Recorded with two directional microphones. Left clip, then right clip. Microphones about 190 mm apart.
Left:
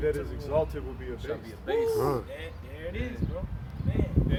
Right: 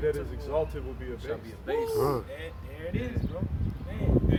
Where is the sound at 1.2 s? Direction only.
10° right (ahead or behind).